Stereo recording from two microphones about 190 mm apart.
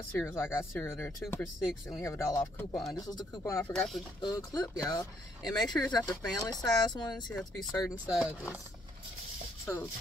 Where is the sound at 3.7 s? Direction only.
Centre (ahead or behind).